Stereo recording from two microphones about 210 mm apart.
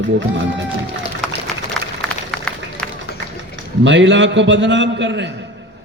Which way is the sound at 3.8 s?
60° right (ahead or behind).